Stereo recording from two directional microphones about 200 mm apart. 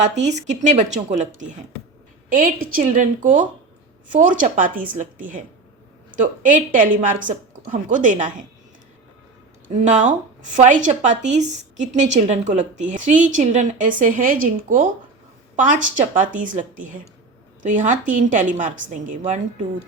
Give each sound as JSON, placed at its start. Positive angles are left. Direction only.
{"t": 0.0, "sound": "a woman's voice", "side_deg": -35}
{"t": 9.6, "sound": "a woman's voice", "side_deg": -35}